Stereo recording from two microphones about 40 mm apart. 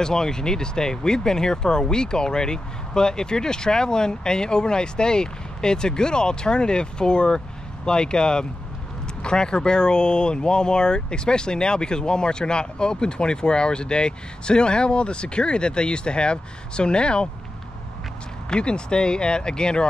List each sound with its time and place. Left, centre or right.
0.0 s speech: centre
18.5 s speech: left